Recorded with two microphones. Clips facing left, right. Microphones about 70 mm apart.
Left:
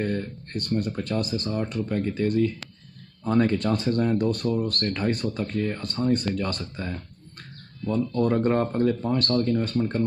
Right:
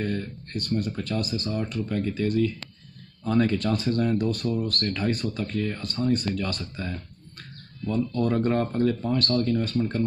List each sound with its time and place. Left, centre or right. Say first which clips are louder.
0.0 s speech: left 2 dB; left